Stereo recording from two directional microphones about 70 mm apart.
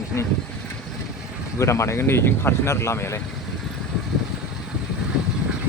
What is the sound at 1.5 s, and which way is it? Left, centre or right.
Speech, left.